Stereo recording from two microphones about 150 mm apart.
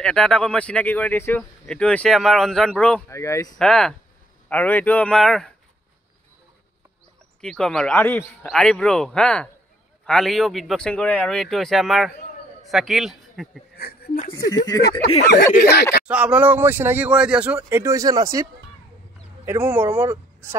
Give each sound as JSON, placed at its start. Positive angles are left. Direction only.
{"t": 0.0, "sound": "speech", "side_deg": 5}
{"t": 3.1, "sound": "speech", "side_deg": 20}
{"t": 3.5, "sound": "a man's voice", "side_deg": 5}
{"t": 7.4, "sound": "a man's voice", "side_deg": 5}
{"t": 13.7, "sound": "a sound", "side_deg": 90}
{"t": 14.5, "sound": "speech", "side_deg": 25}
{"t": 15.7, "sound": "speech", "side_deg": 90}
{"t": 16.1, "sound": "speech", "side_deg": -10}